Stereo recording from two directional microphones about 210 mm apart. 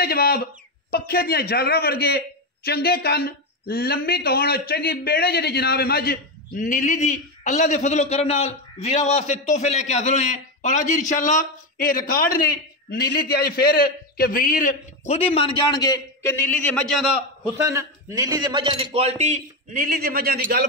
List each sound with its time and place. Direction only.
0.0 s a man's voice: 45° left (ahead or behind); by 17.0 s 5° left (ahead or behind)
17.6 s a man's voice: 15° right (ahead or behind); by 20.6 s 45° right (ahead or behind)